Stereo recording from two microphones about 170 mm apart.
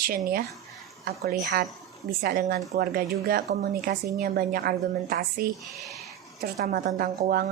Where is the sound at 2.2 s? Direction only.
60° right (ahead or behind).